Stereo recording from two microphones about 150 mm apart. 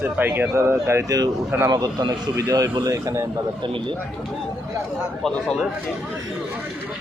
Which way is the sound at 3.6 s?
35° right (ahead or behind).